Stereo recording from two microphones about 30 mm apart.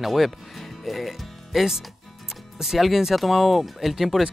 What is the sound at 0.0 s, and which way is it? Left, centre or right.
Speech, centre.